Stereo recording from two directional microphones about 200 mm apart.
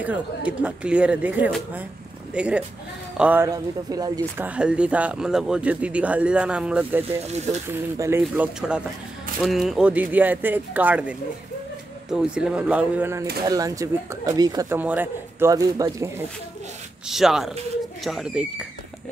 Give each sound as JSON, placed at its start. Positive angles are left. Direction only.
{"t": 0.0, "sound": "speech", "side_deg": -5}
{"t": 4.5, "sound": "speech", "side_deg": -5}
{"t": 17.1, "sound": "speech", "side_deg": 0}